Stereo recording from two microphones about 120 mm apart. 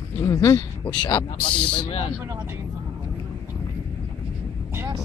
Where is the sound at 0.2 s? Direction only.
25° left (ahead or behind).